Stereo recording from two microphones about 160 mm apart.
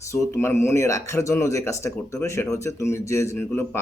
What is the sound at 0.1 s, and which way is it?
Speech, 15° left (ahead or behind).